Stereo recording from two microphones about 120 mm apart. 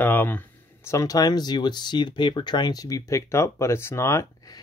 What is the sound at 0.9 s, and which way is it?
Speech, 30° left (ahead or behind).